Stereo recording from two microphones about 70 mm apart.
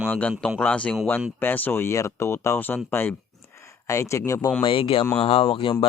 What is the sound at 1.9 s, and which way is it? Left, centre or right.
Speech, left.